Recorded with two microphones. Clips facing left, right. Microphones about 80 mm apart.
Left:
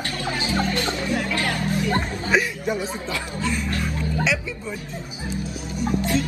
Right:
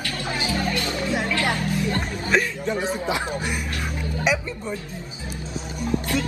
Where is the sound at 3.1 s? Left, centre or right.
Right.